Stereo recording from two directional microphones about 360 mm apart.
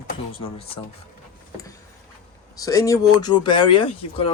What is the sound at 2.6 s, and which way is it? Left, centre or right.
Speech, centre.